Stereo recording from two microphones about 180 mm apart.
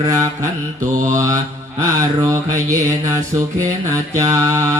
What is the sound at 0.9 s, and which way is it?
Mantra, 45° right (ahead or behind).